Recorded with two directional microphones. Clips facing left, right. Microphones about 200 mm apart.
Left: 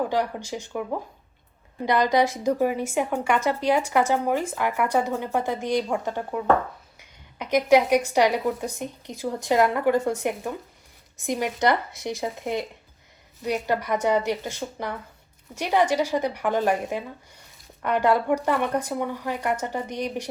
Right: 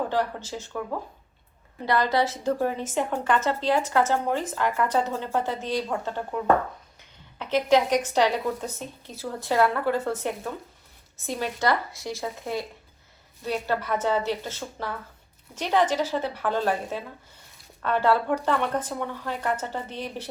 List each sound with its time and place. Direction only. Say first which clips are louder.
0.1 s a woman's voice: left 1 dB; 15° left (ahead or behind)